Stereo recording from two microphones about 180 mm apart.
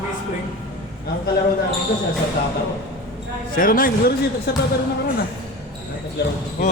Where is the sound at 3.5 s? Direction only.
50° left (ahead or behind).